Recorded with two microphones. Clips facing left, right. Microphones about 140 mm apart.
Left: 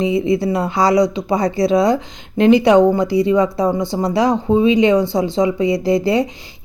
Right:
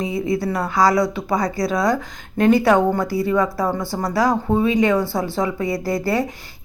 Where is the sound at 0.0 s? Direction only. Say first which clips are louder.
Left 5 dB; 25° left (ahead or behind).